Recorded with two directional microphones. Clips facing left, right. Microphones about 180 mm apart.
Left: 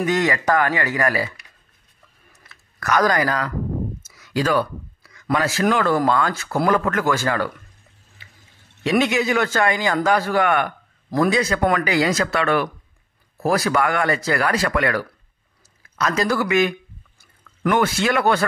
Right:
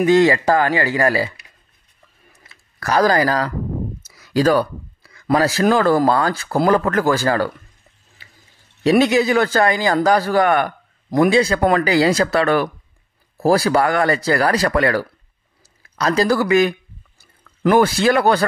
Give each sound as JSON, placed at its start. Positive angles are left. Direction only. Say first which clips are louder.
{"t": 0.0, "sound": "speech", "louder": "right 7 dB", "side_deg": -30}
{"t": 2.8, "sound": "speech", "louder": "right 3 dB", "side_deg": -30}
{"t": 4.0, "sound": "a sound", "louder": "right 8 dB", "side_deg": -35}
{"t": 5.1, "sound": "speech", "louder": "right 5 dB", "side_deg": -35}
{"t": 8.8, "sound": "speech", "louder": "right 5 dB", "side_deg": -35}
{"t": 17.2, "sound": "drip", "louder": "right 4 dB", "side_deg": -35}